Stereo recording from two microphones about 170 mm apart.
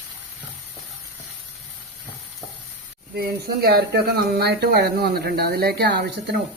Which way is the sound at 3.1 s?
65° right (ahead or behind).